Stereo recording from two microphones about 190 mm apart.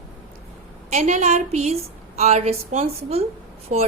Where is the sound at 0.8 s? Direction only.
35° right (ahead or behind).